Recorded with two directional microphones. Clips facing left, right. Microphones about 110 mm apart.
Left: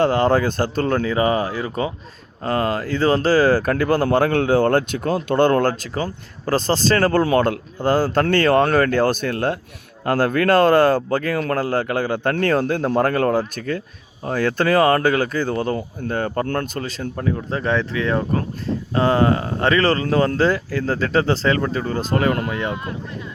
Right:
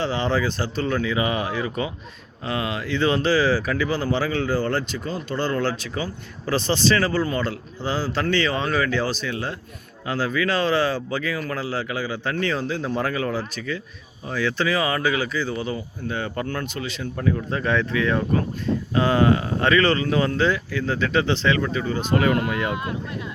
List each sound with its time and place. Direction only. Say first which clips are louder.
0.0 s speech: left 6 dB; 50° left (ahead or behind)
5.9 s speech: left 4 dB; 40° left (ahead or behind)
17.2 s speech: even; 25° left (ahead or behind)